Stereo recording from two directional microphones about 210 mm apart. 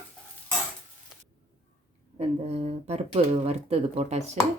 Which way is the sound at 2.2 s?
30° right (ahead or behind).